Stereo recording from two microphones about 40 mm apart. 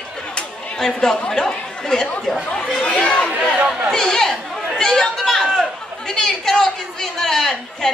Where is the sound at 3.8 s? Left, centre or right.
Centre.